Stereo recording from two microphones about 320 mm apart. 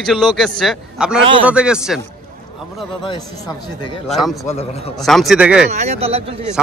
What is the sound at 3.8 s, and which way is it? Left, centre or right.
Speech, centre.